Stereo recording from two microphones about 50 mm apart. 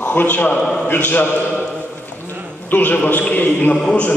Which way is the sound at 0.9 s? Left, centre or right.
Left.